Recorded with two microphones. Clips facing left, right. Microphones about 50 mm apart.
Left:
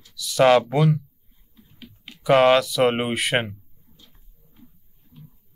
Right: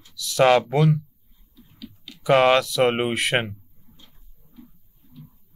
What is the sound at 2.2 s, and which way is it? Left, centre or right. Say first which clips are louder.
Speech: left 1 dB; centre.